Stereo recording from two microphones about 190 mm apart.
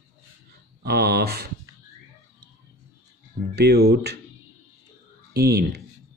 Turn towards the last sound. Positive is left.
turn(degrees=-55)  # may be behind; listen again after turning